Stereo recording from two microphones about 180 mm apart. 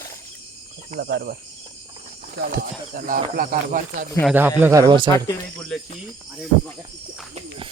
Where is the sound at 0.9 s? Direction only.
60° right (ahead or behind).